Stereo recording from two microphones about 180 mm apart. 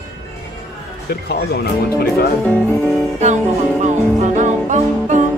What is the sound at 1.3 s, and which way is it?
Speech, 65° left (ahead or behind).